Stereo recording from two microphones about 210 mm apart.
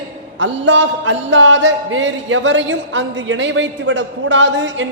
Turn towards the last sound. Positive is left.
turn(degrees=-60)  # may be behind; listen again after turning